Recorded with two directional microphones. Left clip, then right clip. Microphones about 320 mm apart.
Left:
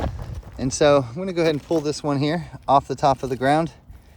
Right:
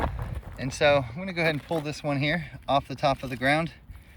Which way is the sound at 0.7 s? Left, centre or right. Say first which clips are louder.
Left 5 dB; centre.